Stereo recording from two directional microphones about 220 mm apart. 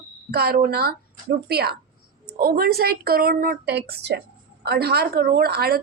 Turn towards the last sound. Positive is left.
turn(degrees=-45)  # may be behind; listen again after turning